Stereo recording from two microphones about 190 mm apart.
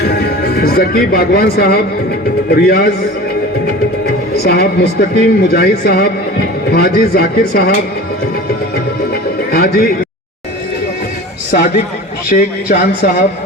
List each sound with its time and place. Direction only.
0.0 s a man's voice: 60° left (ahead or behind)
4.4 s a man's voice: 55° left (ahead or behind)
9.5 s a man's voice: 55° left (ahead or behind)
11.5 s a man's voice: 50° left (ahead or behind)